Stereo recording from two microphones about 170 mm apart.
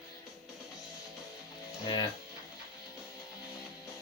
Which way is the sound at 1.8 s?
25° left (ahead or behind).